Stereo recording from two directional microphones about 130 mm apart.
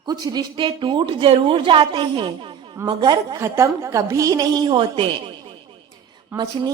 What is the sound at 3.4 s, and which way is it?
A woman's voice, 20° right (ahead or behind).